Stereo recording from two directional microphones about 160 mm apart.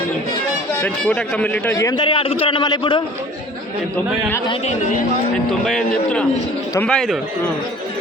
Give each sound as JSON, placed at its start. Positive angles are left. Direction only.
{"t": 0.8, "sound": "a man's voice", "side_deg": 10}
{"t": 2.0, "sound": "a man's voice", "side_deg": 35}
{"t": 5.5, "sound": "a man's voice", "side_deg": 5}